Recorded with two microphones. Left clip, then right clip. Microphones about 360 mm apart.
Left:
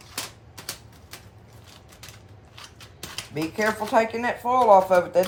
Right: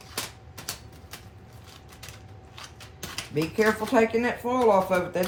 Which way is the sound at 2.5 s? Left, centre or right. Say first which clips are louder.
Even; centre.